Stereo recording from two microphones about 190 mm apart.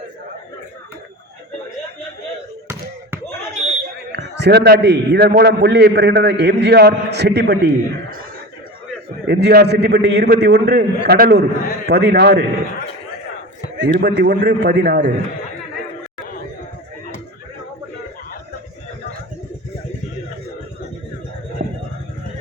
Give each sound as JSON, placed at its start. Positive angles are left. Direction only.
{"t": 4.1, "sound": "a man's voice", "side_deg": -65}
{"t": 9.2, "sound": "a man's voice", "side_deg": -60}
{"t": 13.7, "sound": "a man's voice", "side_deg": -65}